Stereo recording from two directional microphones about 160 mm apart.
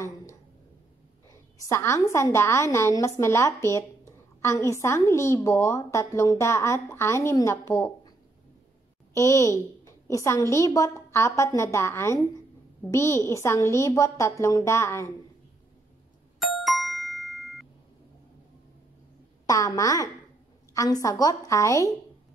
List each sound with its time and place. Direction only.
1.7 s a woman's voice: 15° left (ahead or behind)
9.1 s a woman's voice: 20° left (ahead or behind)
16.3 s ding: centre (ahead or behind)
19.4 s a woman's voice: 20° left (ahead or behind)